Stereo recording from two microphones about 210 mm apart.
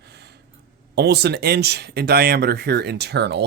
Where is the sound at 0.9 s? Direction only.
50° right (ahead or behind).